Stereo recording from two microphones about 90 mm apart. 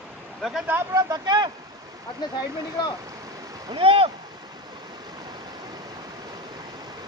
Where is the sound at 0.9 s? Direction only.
50° right (ahead or behind).